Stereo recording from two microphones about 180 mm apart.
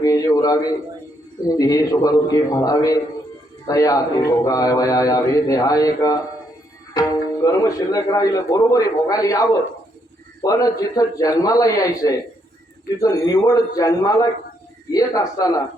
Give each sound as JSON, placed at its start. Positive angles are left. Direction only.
{"t": 0.0, "sound": "a sound", "side_deg": 20}
{"t": 1.5, "sound": "a man's voice", "side_deg": 20}
{"t": 7.4, "sound": "a man's voice", "side_deg": 20}